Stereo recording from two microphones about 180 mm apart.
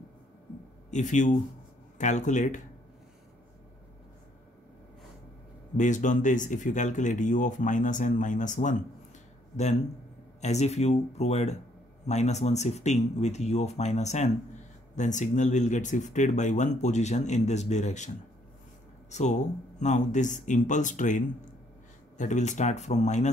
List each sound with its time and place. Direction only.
0.8 s speech: 45° left (ahead or behind)
5.8 s speech: 45° left (ahead or behind)
10.4 s speech: 40° left (ahead or behind)